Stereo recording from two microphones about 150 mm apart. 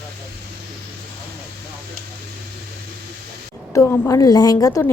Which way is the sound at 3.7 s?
20° left (ahead or behind).